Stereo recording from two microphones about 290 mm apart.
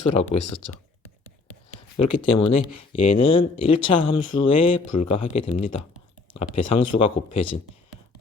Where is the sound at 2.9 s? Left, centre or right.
Centre.